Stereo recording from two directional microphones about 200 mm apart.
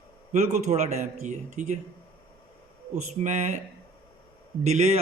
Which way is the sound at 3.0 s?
35° right (ahead or behind).